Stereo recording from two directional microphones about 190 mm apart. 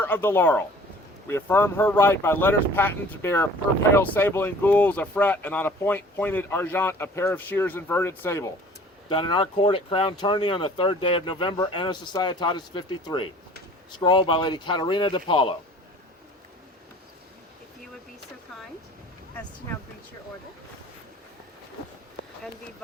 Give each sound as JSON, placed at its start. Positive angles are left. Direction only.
{"t": 0.0, "sound": "speech", "side_deg": 10}
{"t": 9.0, "sound": "speech", "side_deg": 25}